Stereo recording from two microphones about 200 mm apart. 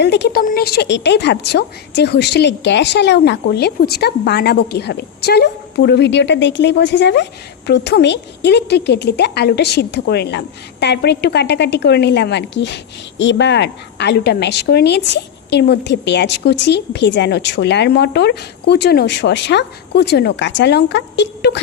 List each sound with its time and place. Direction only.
0.0 s a woman's voice: 55° left (ahead or behind)